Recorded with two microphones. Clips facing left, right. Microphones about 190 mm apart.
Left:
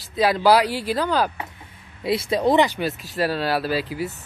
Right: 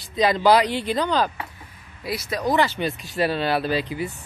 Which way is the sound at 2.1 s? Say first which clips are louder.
Left 5 dB; 25° left (ahead or behind).